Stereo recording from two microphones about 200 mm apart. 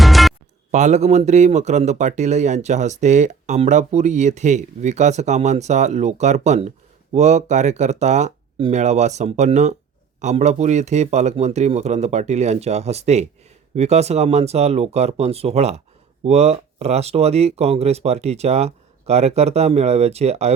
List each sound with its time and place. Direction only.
0.0 s music: centre (ahead or behind)
0.7 s speech: 35° right (ahead or behind)